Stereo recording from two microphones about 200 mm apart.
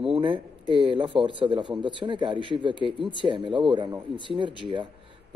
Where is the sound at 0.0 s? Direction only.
25° right (ahead or behind).